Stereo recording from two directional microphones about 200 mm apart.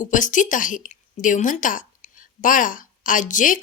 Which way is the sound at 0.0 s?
40° left (ahead or behind).